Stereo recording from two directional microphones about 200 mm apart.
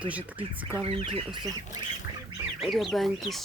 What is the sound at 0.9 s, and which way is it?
Speech, 30° right (ahead or behind).